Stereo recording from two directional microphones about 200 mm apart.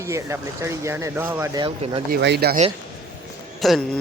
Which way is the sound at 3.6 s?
Centre (ahead or behind).